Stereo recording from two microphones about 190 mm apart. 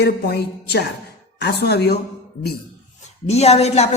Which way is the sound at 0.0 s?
60° left (ahead or behind).